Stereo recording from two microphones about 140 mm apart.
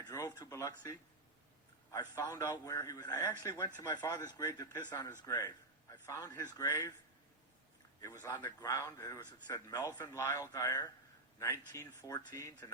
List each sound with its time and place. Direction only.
0.1 s a man's voice: 25° left (ahead or behind)
8.0 s a man's voice: 25° left (ahead or behind)